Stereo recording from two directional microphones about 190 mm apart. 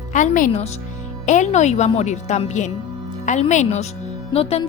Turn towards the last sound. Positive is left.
turn(degrees=30)  # may be behind; listen again after turning